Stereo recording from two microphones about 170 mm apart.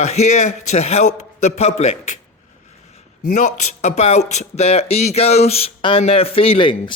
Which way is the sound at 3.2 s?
45° left (ahead or behind).